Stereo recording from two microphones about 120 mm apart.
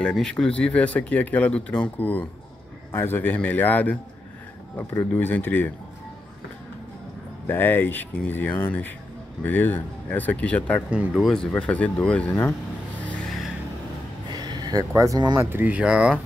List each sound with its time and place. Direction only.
0.0 s speech: 5° left (ahead or behind)
7.4 s speech: 15° left (ahead or behind)
10.9 s speech: 5° right (ahead or behind); by 12.5 s 10° left (ahead or behind)
14.3 s speech: 35° right (ahead or behind)
15.5 s speech: 15° right (ahead or behind)